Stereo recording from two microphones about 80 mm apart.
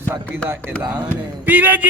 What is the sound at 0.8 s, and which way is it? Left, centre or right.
Speech, centre.